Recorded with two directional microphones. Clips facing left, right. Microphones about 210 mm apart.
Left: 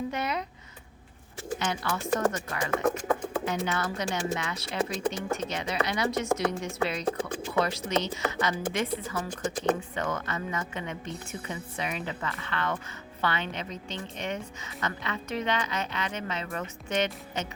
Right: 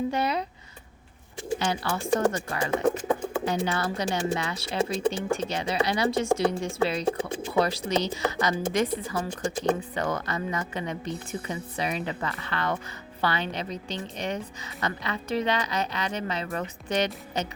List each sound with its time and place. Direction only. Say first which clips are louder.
0.1 s a woman's voice: right 4 dB; 30° right (ahead or behind)
1.5 s a woman's voice: right 3 dB; 30° right (ahead or behind)